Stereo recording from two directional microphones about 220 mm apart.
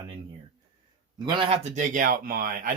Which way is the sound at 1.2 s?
25° right (ahead or behind).